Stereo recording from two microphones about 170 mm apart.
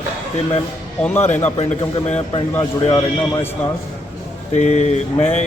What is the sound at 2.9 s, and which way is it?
Speech, 20° left (ahead or behind).